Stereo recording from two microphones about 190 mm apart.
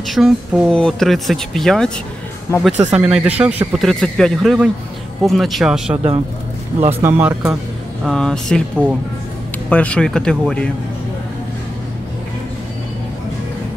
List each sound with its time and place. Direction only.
0.1 s speech: centre (ahead or behind)
9.7 s speech: 5° left (ahead or behind)